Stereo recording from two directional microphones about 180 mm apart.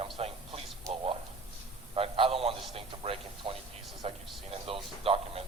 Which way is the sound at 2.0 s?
30° right (ahead or behind).